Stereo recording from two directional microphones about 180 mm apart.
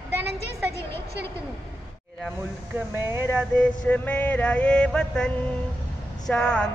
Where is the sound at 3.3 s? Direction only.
5° left (ahead or behind).